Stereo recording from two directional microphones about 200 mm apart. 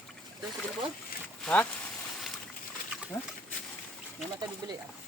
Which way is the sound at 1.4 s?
5° left (ahead or behind).